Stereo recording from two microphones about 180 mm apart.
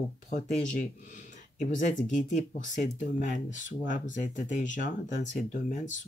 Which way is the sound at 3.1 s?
45° left (ahead or behind).